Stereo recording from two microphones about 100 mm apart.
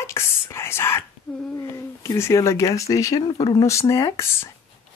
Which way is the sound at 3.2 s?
50° left (ahead or behind).